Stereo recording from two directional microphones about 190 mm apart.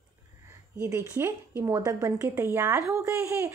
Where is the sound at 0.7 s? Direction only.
10° right (ahead or behind).